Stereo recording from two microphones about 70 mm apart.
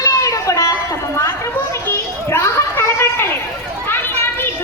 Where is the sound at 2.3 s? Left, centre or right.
Left.